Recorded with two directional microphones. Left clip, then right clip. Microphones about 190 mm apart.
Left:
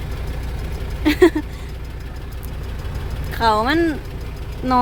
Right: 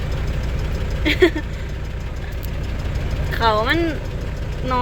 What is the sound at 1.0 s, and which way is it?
Speech, 35° left (ahead or behind).